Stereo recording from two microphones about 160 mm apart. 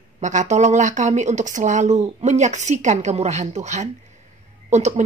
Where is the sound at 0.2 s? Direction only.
50° right (ahead or behind).